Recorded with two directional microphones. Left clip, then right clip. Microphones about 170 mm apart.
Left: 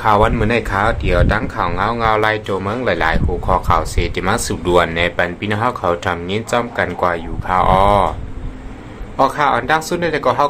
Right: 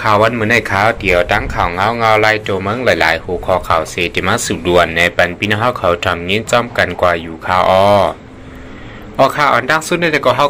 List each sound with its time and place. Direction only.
0.0 s speech: 10° right (ahead or behind)
9.1 s speech: 10° right (ahead or behind)